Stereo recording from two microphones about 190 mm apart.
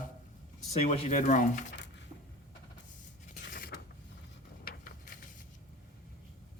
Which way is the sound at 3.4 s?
60° left (ahead or behind).